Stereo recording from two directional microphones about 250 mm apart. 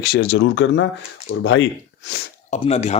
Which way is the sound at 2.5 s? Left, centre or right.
Left.